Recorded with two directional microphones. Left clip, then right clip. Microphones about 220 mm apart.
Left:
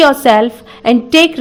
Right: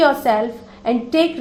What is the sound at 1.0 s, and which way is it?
Speech, 55° left (ahead or behind).